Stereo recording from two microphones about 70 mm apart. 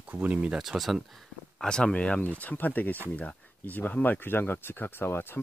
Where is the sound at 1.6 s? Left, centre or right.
Centre.